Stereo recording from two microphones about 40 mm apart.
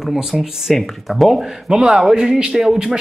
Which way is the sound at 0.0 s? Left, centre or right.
Centre.